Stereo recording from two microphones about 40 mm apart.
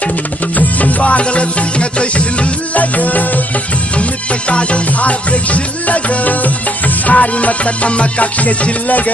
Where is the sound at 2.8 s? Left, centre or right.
Left.